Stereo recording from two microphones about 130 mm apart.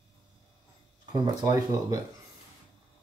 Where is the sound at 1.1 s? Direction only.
30° right (ahead or behind).